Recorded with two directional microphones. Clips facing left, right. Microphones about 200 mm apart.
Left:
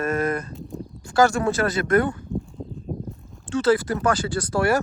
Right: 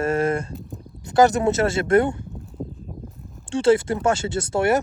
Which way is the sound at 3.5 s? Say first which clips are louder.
Right 2 dB; 30° right (ahead or behind).